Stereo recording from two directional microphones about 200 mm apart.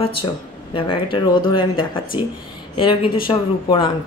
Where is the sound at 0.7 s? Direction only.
25° left (ahead or behind).